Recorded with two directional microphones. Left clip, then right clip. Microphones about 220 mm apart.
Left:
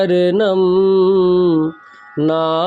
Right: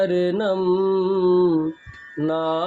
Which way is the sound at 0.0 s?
45° left (ahead or behind).